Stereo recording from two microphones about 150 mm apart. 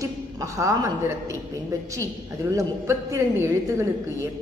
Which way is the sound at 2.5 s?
20° right (ahead or behind).